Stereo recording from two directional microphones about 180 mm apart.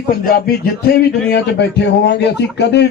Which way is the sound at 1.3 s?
70° left (ahead or behind).